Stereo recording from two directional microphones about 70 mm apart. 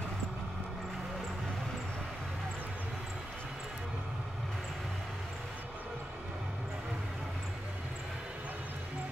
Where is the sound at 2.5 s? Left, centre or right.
Right.